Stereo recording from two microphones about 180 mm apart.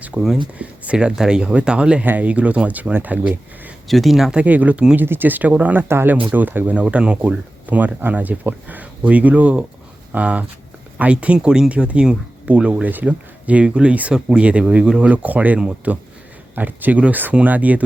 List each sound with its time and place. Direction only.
0.0 s speech: 5° right (ahead or behind)